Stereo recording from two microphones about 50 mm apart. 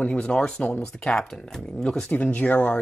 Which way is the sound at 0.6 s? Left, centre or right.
Left.